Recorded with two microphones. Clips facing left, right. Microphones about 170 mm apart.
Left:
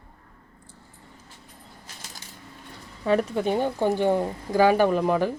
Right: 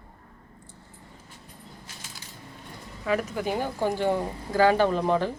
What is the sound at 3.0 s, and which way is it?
A woman's voice, 30° left (ahead or behind).